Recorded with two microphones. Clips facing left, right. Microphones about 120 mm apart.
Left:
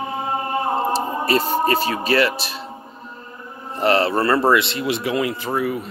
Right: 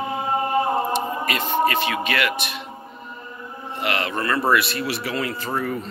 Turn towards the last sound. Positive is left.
turn(degrees=10)  # may be behind; listen again after turning